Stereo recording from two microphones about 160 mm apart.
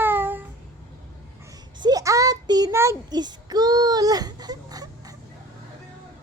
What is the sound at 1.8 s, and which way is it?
Child singing, 25° right (ahead or behind).